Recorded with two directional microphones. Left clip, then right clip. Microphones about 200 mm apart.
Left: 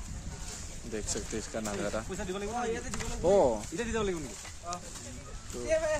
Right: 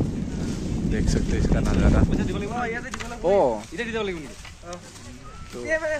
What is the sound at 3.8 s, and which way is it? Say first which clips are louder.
Speech: right 4 dB; 40° left (ahead or behind).